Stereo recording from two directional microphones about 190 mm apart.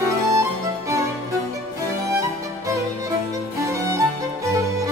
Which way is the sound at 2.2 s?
15° right (ahead or behind).